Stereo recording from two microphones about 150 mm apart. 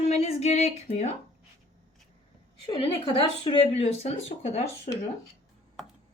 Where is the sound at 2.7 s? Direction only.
40° left (ahead or behind).